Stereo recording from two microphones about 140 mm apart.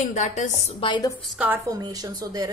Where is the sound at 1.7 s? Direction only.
25° right (ahead or behind).